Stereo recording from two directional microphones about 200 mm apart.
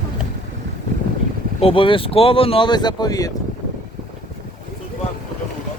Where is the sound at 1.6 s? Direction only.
25° left (ahead or behind).